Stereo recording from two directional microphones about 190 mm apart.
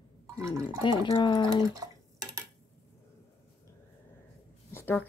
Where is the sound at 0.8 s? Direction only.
25° left (ahead or behind).